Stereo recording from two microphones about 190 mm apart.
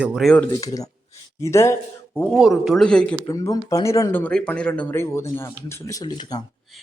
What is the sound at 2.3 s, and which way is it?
Speech, centre (ahead or behind).